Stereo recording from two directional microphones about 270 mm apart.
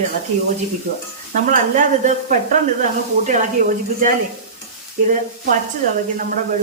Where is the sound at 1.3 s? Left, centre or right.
Right.